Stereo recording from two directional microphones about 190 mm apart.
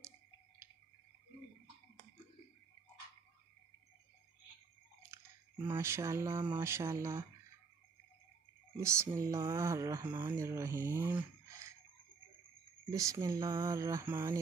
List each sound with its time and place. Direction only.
5.1 s chewing: 15° right (ahead or behind)
5.8 s speech: 15° right (ahead or behind)
8.7 s speech: 15° right (ahead or behind)
12.9 s speech: 15° right (ahead or behind)